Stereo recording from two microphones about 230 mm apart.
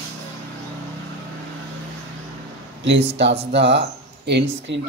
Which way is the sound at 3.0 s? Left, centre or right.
Right.